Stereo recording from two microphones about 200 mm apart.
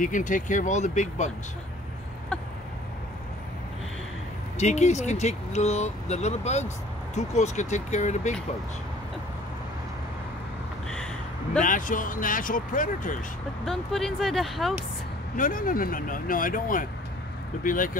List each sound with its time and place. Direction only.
0.0 s speech: 40° left (ahead or behind)
4.6 s speech: 35° left (ahead or behind)
11.6 s speech: 40° left (ahead or behind)
13.7 s speech: centre (ahead or behind)
15.3 s speech: 45° left (ahead or behind)